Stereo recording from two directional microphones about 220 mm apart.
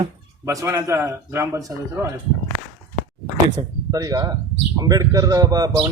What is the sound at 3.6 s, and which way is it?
A man's voice, 15° right (ahead or behind).